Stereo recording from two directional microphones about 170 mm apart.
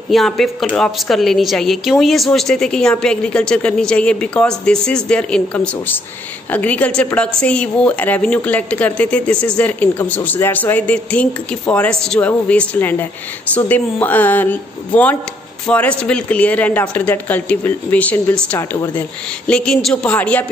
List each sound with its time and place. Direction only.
0.1 s a woman's voice: centre (ahead or behind)